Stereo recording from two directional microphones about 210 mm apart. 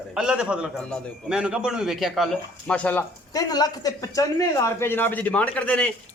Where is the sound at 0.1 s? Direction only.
5° right (ahead or behind).